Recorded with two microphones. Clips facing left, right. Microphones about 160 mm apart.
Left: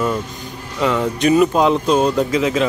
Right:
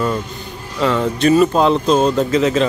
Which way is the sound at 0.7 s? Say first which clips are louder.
Right 1 dB; 10° left (ahead or behind).